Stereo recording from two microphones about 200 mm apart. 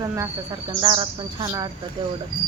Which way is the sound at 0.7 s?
25° right (ahead or behind).